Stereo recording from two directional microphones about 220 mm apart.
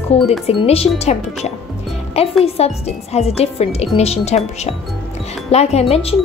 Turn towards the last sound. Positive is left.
turn(degrees=25)  # may be behind; listen again after turning